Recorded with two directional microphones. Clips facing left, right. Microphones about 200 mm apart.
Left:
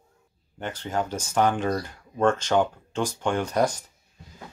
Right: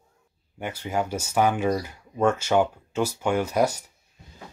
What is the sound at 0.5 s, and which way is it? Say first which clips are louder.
Speech: right 1 dB; 10° right (ahead or behind).